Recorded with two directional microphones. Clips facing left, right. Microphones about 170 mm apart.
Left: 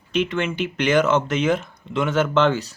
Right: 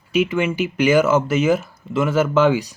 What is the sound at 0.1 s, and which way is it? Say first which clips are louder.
Speech: right 4 dB; 10° right (ahead or behind).